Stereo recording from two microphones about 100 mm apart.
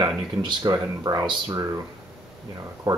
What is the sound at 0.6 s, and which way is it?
Speech, 40° right (ahead or behind).